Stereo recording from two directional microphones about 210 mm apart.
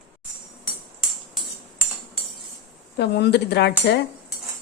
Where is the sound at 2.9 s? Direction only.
55° left (ahead or behind).